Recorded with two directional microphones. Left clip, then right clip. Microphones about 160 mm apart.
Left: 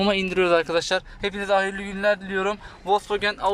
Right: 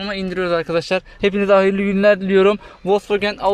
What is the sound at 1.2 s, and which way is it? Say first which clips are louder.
Speech: right 10 dB; 15° right (ahead or behind).